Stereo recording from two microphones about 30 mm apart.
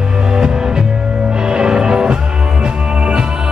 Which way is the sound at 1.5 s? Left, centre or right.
Right.